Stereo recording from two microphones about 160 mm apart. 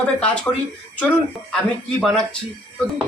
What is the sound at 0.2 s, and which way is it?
Speech, 10° left (ahead or behind).